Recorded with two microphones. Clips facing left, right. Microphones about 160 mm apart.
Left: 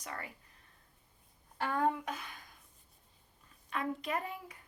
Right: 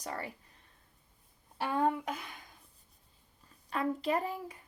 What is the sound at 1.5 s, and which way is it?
Speech, 10° right (ahead or behind).